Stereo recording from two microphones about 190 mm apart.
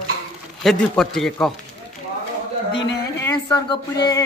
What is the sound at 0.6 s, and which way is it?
Speech, centre (ahead or behind).